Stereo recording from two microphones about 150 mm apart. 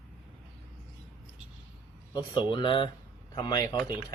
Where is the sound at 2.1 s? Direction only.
30° left (ahead or behind).